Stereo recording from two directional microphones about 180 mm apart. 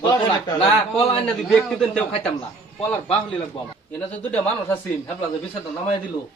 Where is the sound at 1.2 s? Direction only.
5° left (ahead or behind).